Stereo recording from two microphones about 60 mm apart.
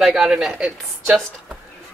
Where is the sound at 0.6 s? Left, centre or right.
Centre.